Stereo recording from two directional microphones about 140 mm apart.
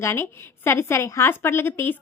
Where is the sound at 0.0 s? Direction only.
20° left (ahead or behind).